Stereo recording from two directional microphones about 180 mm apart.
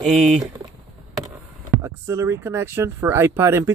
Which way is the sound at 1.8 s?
15° right (ahead or behind).